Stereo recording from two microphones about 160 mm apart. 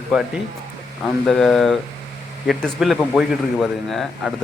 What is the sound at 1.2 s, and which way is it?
A man's voice, 5° left (ahead or behind).